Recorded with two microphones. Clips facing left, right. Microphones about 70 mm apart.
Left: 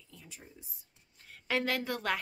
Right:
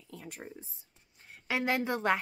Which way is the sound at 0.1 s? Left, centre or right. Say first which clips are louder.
Right 9 dB; right.